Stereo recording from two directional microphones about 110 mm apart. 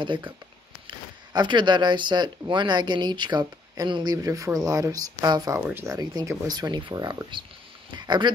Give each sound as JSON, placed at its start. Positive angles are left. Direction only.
{"t": 0.0, "sound": "speech", "side_deg": -45}
{"t": 5.5, "sound": "speech", "side_deg": -20}
{"t": 5.9, "sound": "speech", "side_deg": -35}